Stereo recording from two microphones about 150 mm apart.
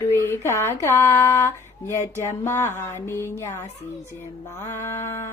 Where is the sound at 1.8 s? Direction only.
15° left (ahead or behind).